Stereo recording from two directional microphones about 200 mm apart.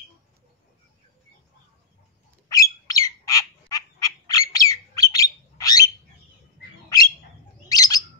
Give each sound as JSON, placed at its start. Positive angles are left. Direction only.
{"t": 2.5, "sound": "squawk", "side_deg": 15}
{"t": 6.9, "sound": "bird", "side_deg": 20}